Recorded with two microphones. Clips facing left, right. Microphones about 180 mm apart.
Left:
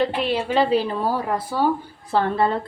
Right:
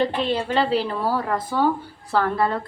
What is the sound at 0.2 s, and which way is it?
A woman's voice, 10° left (ahead or behind).